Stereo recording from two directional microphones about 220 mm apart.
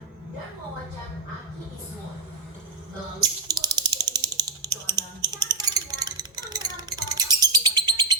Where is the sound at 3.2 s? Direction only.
20° right (ahead or behind).